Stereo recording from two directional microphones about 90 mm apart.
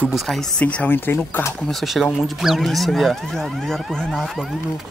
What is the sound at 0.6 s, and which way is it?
Speech, 15° left (ahead or behind).